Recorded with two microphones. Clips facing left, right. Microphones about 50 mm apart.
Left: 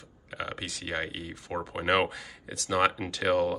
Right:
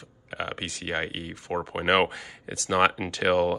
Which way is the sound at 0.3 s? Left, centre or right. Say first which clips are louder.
Right 3 dB; right.